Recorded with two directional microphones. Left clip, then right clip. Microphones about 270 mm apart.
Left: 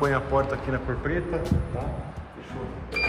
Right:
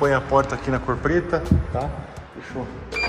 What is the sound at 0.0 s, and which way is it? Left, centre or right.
Speech, centre.